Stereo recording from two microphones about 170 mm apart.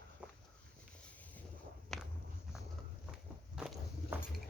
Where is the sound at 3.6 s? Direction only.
5° right (ahead or behind).